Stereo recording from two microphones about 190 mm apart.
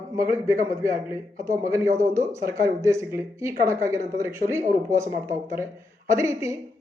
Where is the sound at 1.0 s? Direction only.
15° right (ahead or behind).